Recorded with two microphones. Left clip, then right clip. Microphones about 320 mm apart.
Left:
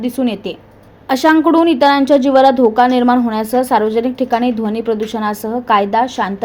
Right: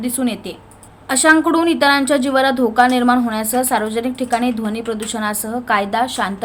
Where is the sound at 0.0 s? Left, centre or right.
Centre.